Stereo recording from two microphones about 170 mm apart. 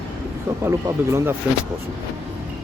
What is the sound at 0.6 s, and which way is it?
Speech, 15° right (ahead or behind).